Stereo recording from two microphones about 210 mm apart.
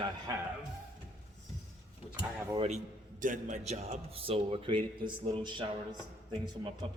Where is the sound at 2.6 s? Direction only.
30° right (ahead or behind).